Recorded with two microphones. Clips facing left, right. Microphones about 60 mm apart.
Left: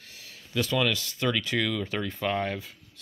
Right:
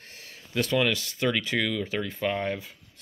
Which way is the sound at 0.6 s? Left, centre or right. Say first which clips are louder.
Right 1 dB; right.